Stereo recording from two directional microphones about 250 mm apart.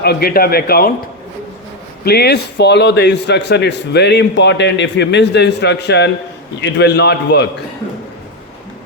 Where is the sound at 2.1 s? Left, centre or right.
Left.